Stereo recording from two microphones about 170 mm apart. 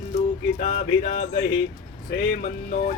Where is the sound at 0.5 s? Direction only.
50° left (ahead or behind).